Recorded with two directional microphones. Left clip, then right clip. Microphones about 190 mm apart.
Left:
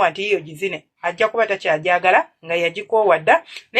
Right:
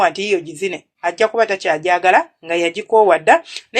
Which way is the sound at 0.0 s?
30° right (ahead or behind).